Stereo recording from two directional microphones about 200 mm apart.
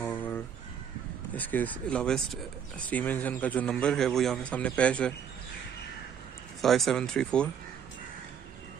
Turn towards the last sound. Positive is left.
turn(degrees=5)  # may be behind; listen again after turning